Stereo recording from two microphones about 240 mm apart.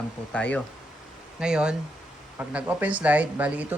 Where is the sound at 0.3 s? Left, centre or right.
Centre.